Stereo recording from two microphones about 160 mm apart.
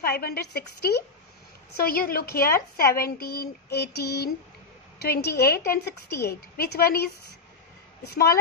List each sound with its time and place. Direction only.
0.0 s a woman's voice: 75° left (ahead or behind)
1.8 s a woman's voice: 75° left (ahead or behind)
3.0 s child singing: 75° left (ahead or behind); by 4.3 s 90° left
4.9 s a woman's voice: 85° left